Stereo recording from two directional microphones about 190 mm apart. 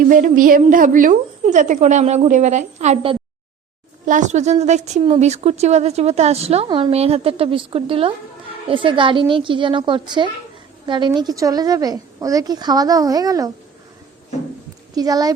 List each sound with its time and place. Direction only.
0.1 s a sound: 45° right (ahead or behind)
0.6 s a woman's voice: 45° right (ahead or behind); by 13.5 s 20° right (ahead or behind)
14.9 s a woman's voice: 20° right (ahead or behind)